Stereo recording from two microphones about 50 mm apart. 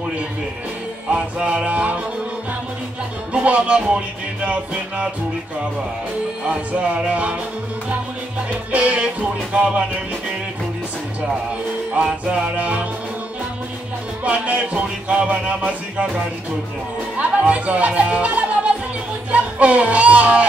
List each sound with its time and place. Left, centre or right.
1.1 s music: right
3.3 s music: right
6.4 s music: right
8.7 s music: right
12.0 s music: right
14.2 s music: right
17.2 s speech: right
19.3 s music: right